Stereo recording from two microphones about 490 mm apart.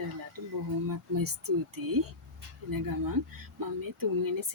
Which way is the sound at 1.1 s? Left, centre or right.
Right.